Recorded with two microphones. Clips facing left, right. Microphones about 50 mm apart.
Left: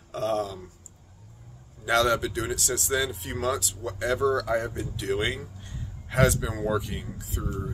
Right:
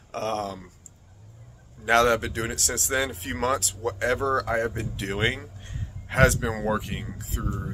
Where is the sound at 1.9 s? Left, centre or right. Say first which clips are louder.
Right 3 dB; right.